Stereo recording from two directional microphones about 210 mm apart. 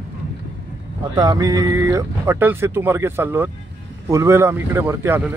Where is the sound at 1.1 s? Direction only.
15° right (ahead or behind).